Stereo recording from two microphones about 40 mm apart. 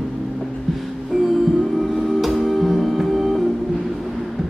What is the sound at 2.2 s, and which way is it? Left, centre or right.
Music, centre.